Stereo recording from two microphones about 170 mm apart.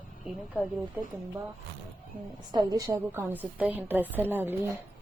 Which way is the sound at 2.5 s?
20° right (ahead or behind).